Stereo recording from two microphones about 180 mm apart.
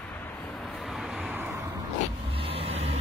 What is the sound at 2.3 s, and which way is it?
Vehicle, 30° right (ahead or behind).